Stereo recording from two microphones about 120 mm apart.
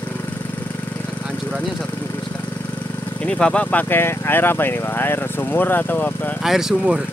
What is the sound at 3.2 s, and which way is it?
Speech, 10° left (ahead or behind).